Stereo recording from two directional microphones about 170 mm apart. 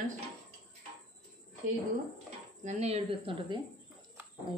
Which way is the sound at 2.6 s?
40° right (ahead or behind).